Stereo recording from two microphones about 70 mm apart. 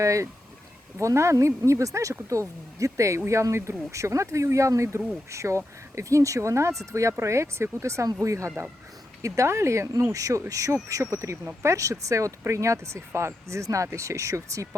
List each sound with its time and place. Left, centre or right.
0.0 s speech: right